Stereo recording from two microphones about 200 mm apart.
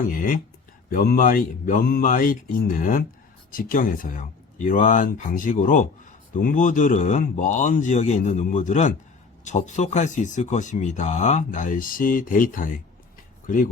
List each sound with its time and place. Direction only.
0.1 s speech: 45° left (ahead or behind)